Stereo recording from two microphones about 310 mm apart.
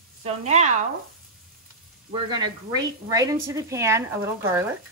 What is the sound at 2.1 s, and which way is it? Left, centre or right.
Speech, centre.